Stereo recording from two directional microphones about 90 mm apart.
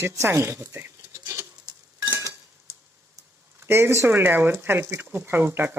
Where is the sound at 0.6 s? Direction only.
25° right (ahead or behind).